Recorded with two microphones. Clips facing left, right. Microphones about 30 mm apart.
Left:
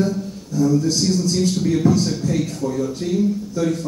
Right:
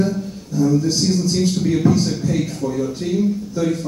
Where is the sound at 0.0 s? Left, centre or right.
Centre.